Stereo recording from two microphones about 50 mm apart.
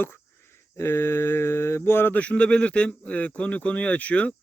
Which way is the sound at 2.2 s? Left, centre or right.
Left.